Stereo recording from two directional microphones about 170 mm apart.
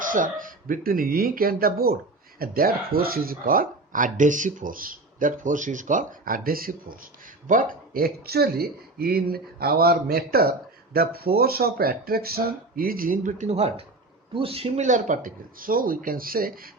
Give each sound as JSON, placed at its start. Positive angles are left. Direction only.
{"t": 0.0, "sound": "speech", "side_deg": -50}